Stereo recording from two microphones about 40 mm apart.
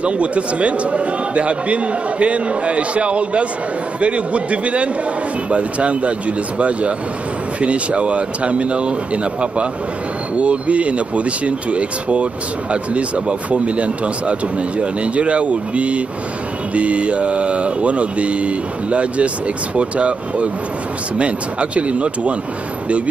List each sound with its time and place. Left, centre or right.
0.0 s speech: right